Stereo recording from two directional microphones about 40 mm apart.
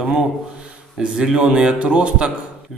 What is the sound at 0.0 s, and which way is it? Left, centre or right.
Speech, centre.